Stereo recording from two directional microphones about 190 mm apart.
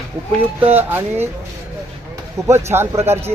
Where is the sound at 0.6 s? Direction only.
10° right (ahead or behind).